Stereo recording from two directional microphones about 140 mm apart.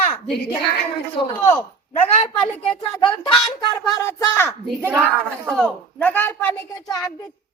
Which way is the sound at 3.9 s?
20° left (ahead or behind).